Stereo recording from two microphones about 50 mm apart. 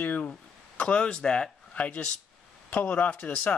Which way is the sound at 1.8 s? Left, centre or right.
Left.